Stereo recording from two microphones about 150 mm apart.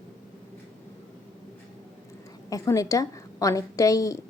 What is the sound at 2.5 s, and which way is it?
A woman's voice, 20° left (ahead or behind).